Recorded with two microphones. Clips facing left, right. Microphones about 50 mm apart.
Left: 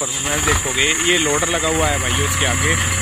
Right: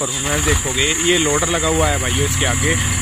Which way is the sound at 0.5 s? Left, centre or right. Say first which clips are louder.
Left 3 dB; left.